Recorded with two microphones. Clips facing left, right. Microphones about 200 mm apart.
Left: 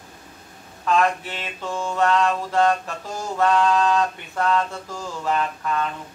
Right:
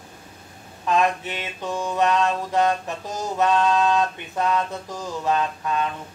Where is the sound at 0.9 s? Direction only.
20° right (ahead or behind).